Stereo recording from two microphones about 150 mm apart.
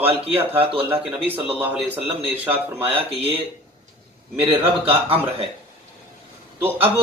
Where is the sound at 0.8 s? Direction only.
10° right (ahead or behind).